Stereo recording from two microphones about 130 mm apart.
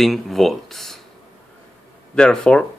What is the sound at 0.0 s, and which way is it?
Speech, centre (ahead or behind).